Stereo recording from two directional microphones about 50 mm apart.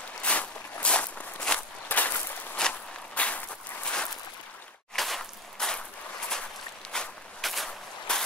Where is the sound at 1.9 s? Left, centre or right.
Left.